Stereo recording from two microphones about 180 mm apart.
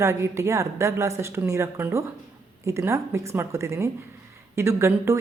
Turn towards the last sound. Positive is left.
turn(degrees=-15)  # may be behind; listen again after turning